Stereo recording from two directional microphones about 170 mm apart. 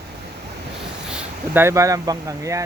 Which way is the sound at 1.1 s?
10° right (ahead or behind).